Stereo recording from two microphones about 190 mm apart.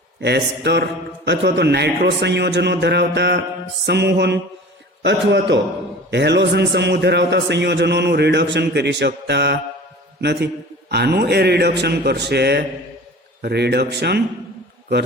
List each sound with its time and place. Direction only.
0.2 s a man's voice: 60° right (ahead or behind)